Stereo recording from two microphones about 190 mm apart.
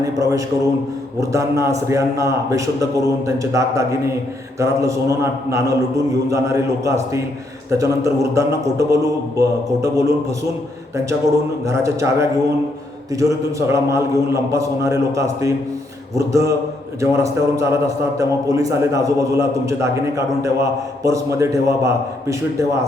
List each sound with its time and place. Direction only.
0.0 s a man's voice: 15° right (ahead or behind)
11.6 s a man's voice: 15° right (ahead or behind)